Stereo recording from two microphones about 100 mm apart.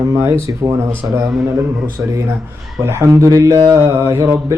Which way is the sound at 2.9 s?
30° right (ahead or behind).